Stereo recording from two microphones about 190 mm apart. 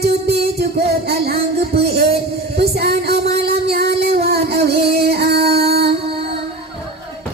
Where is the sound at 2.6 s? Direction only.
55° right (ahead or behind).